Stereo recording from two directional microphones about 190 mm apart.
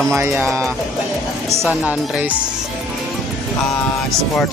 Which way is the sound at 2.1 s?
5° right (ahead or behind).